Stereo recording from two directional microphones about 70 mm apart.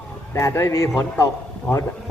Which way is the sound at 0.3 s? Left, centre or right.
Left.